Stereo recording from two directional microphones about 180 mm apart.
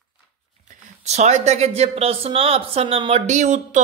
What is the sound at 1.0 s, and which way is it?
A man's voice, 40° right (ahead or behind).